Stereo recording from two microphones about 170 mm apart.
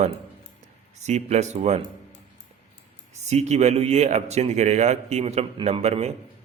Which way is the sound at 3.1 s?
40° right (ahead or behind).